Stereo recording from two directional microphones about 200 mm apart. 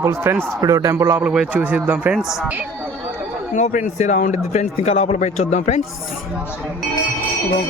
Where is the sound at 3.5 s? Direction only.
40° left (ahead or behind).